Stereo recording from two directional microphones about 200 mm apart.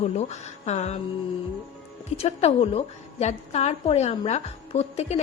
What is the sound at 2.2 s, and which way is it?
Music, 30° left (ahead or behind).